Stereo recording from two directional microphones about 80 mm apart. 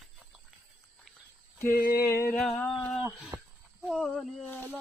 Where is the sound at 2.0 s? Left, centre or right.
Left.